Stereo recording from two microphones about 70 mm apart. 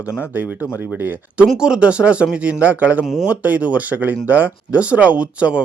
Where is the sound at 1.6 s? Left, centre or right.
Centre.